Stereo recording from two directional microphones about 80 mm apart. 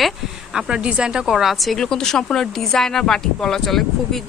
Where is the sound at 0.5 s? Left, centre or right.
Centre.